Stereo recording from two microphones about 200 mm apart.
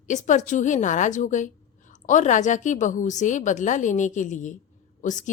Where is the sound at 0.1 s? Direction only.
40° left (ahead or behind).